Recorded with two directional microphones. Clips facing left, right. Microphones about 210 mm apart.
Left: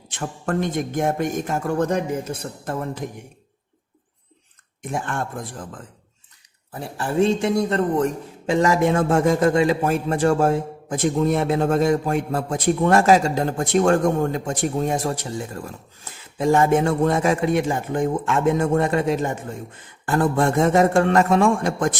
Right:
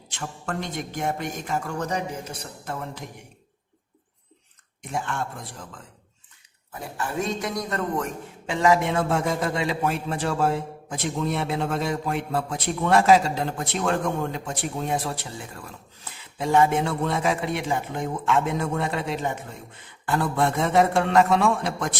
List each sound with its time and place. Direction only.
0.1 s a man's voice: 50° left (ahead or behind)
4.8 s a man's voice: 50° left (ahead or behind)
6.7 s a man's voice: 30° left (ahead or behind); by 21.9 s 50° left (ahead or behind)